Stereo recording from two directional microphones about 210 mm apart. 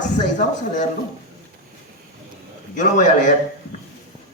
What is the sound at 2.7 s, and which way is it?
Speech, 35° left (ahead or behind).